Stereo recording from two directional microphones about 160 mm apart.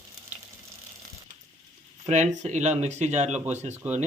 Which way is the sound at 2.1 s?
50° right (ahead or behind).